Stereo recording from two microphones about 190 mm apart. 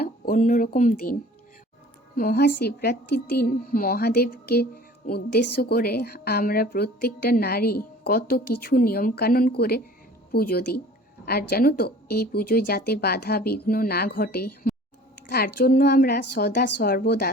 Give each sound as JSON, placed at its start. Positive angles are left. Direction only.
{"t": 0.0, "sound": "speech", "side_deg": 45}
{"t": 2.1, "sound": "a woman's voice", "side_deg": 55}